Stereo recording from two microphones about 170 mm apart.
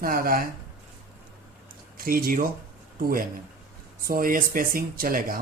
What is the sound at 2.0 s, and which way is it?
Speech, 60° right (ahead or behind).